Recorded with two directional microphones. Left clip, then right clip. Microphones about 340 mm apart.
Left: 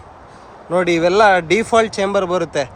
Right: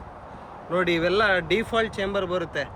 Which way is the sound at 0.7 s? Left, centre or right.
Centre.